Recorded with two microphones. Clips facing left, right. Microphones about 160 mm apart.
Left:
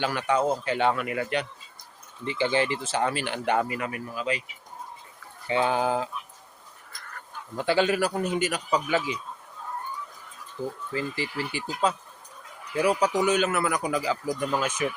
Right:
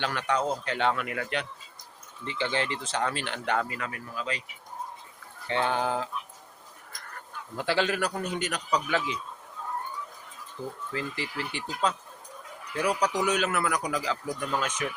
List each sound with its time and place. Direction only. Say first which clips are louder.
0.0 s speech: left 3 dB; 10° left (ahead or behind)
5.5 s speech: left 3 dB; 5° left (ahead or behind)
7.5 s speech: left 4 dB; centre (ahead or behind)
10.9 s speech: left 3 dB; centre (ahead or behind)